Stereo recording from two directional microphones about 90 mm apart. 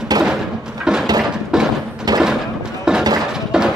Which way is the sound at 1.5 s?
5° right (ahead or behind).